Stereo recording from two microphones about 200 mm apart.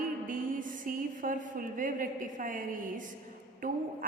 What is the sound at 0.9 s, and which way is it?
A woman's voice, 45° right (ahead or behind).